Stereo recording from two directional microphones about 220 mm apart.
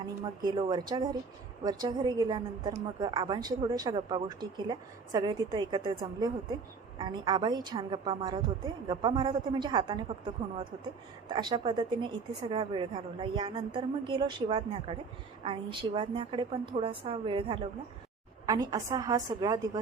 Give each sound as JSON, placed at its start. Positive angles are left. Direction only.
{"t": 0.2, "sound": "a woman's voice", "side_deg": -20}